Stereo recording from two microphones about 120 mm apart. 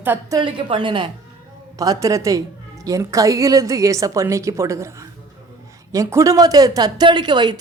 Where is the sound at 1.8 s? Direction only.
30° right (ahead or behind).